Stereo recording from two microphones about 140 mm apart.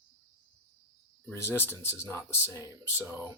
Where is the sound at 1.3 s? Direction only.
20° left (ahead or behind).